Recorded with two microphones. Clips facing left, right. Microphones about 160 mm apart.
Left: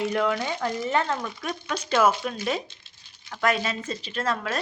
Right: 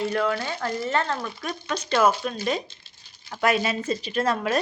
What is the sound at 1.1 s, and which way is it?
A woman's voice, centre (ahead or behind).